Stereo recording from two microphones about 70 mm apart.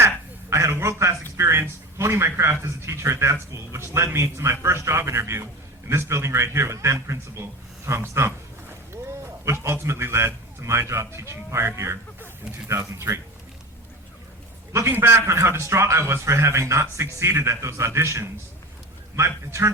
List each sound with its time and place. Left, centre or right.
0.5 s a sound: right
2.0 s a man's voice: right
14.7 s a man's voice: right